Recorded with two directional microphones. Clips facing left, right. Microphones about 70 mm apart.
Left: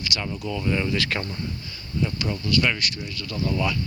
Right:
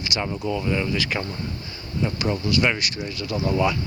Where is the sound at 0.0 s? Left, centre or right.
Right.